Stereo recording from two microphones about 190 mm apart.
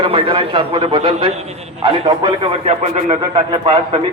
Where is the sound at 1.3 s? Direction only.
35° right (ahead or behind).